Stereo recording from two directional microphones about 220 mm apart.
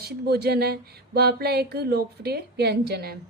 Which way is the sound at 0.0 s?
45° right (ahead or behind).